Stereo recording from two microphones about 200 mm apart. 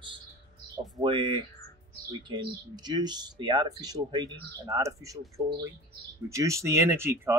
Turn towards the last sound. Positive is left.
turn(degrees=-10)  # may be behind; listen again after turning